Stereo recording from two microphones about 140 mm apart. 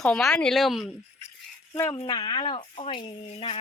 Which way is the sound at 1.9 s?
30° left (ahead or behind).